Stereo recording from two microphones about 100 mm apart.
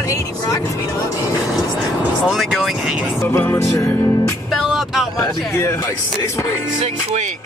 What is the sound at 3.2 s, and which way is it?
Speech, 25° left (ahead or behind).